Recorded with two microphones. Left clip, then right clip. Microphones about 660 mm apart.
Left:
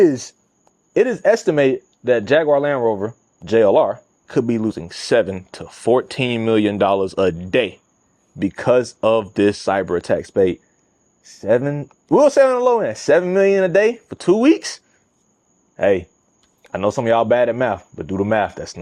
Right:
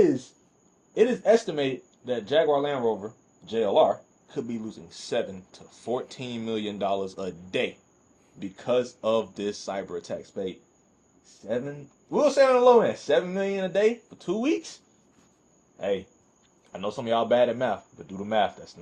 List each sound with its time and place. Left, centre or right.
0.9 s speech: left
4.3 s speech: left
8.4 s speech: left
16.7 s speech: left